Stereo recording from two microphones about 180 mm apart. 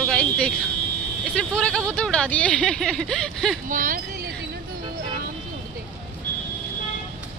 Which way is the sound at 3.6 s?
50° right (ahead or behind).